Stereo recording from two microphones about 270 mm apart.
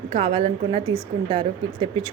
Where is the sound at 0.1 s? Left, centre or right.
Right.